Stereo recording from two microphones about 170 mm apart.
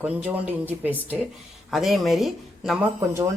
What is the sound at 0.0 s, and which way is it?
Speech, 10° right (ahead or behind).